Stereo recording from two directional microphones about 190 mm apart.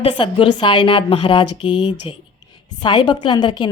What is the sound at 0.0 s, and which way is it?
Speech, 30° left (ahead or behind).